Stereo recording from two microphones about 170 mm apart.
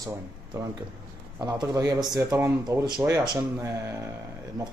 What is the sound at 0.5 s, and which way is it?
Speech, 15° right (ahead or behind).